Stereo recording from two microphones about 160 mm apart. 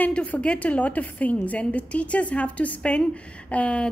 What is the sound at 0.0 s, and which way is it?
A woman's voice, 10° left (ahead or behind).